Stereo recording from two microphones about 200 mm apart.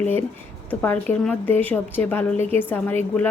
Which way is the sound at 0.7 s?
10° left (ahead or behind).